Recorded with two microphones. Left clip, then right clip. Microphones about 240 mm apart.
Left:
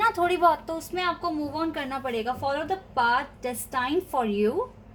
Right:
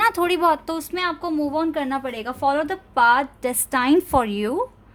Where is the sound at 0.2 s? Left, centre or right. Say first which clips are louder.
Right 3 dB; right.